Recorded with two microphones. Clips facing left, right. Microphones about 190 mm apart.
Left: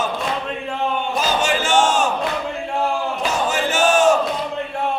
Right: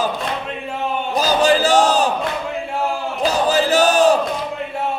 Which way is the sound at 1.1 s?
35° right (ahead or behind).